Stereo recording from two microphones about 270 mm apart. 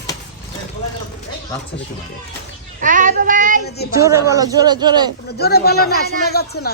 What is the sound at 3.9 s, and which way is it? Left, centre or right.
A man's voice, centre.